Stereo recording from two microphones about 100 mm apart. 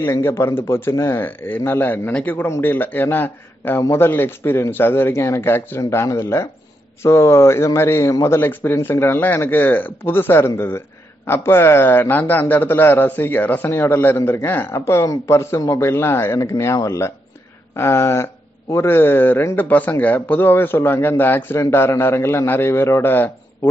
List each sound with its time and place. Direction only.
0.0 s speech: 25° left (ahead or behind)